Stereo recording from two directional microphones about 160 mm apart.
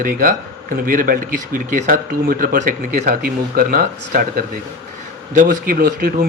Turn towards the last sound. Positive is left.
turn(degrees=-65)  # may be behind; listen again after turning